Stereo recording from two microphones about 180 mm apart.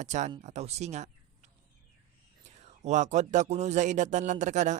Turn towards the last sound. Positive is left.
turn(degrees=-40)  # may be behind; listen again after turning